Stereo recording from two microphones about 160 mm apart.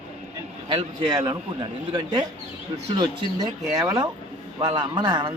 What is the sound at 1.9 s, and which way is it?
Speech, 25° right (ahead or behind).